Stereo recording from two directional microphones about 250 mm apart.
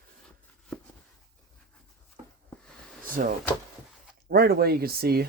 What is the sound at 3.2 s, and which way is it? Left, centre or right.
Speech, right.